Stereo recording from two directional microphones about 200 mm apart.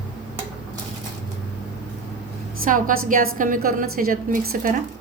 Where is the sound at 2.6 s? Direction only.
40° right (ahead or behind).